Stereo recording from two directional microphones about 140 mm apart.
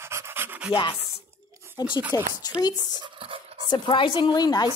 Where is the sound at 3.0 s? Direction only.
40° right (ahead or behind).